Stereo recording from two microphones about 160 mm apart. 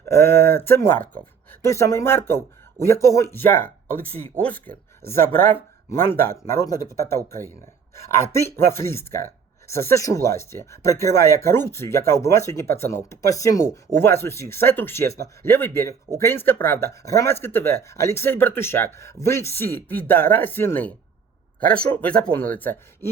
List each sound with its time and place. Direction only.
0.0 s speech: 15° left (ahead or behind)